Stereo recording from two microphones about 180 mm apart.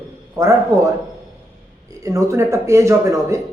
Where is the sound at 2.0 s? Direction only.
15° right (ahead or behind).